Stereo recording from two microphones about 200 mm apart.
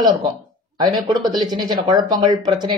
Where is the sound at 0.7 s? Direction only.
20° right (ahead or behind).